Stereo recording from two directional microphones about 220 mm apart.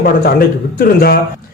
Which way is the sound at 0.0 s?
45° left (ahead or behind).